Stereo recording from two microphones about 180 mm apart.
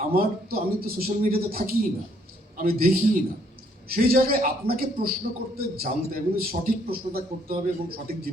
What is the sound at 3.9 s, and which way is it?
A man's voice, 55° right (ahead or behind).